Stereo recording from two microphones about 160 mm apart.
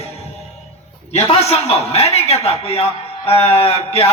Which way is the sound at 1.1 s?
40° left (ahead or behind).